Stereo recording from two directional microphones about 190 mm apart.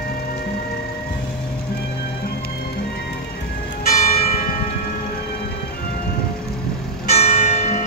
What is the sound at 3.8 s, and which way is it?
Church bell, 35° left (ahead or behind).